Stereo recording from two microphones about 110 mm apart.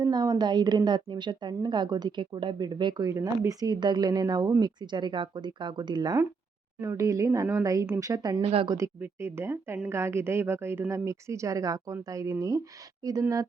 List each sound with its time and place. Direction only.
0.0 s speech: 35° right (ahead or behind)
3.1 s speech: 30° right (ahead or behind)
6.8 s a woman's voice: 30° right (ahead or behind)
8.4 s speech: 60° right (ahead or behind)
8.6 s speech: 35° right (ahead or behind)
9.0 s a woman's voice: 20° right (ahead or behind)